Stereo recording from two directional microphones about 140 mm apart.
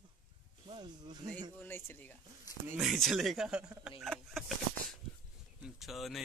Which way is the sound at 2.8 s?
Centre (ahead or behind).